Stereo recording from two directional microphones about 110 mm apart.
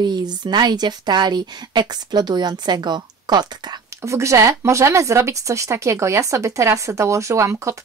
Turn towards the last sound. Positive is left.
turn(degrees=-25)  # may be behind; listen again after turning